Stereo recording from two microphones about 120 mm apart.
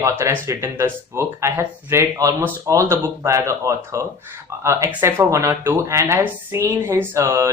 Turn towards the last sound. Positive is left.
turn(degrees=-25)  # may be behind; listen again after turning